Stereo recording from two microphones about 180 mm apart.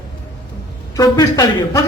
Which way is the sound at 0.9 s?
20° left (ahead or behind).